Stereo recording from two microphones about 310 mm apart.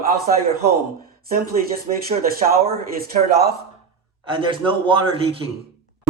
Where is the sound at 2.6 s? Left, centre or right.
Right.